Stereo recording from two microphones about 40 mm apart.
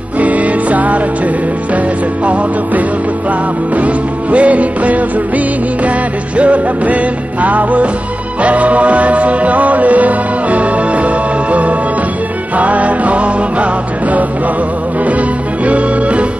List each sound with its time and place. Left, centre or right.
0.2 s music: right
3.7 s music: right
6.3 s music: right
12.5 s music: right
15.0 s music: right